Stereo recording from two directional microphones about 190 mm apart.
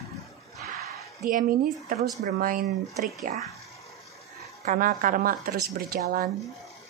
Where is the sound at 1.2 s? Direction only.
45° right (ahead or behind).